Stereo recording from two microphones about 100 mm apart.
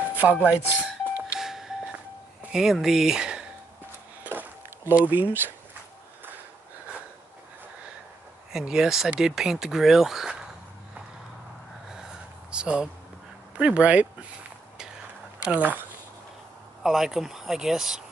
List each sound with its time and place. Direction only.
0.1 s speech: 15° right (ahead or behind)
1.3 s a sound: 5° right (ahead or behind)
2.5 s speech: 5° right (ahead or behind)
4.2 s a sound: 20° right (ahead or behind)
8.5 s speech: 5° right (ahead or behind)
11.9 s a sound: 5° right (ahead or behind)
13.6 s speech: 10° right (ahead or behind)
15.4 s speech: 15° right (ahead or behind)
16.8 s speech: 5° right (ahead or behind)